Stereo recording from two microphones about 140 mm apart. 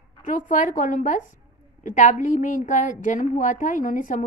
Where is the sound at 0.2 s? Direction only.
65° left (ahead or behind).